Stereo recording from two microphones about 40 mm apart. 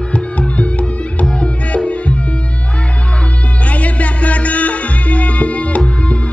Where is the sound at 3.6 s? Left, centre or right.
Left.